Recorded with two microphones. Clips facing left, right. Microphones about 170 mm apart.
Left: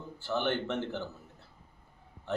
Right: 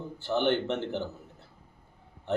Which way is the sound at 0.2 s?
20° right (ahead or behind).